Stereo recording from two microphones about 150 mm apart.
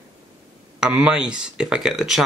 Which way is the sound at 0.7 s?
5° right (ahead or behind).